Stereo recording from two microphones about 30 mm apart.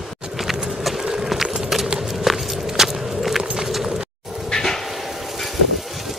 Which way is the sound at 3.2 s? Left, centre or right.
Centre.